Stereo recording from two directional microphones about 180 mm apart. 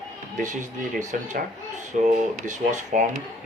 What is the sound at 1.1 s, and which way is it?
Speech, 45° right (ahead or behind).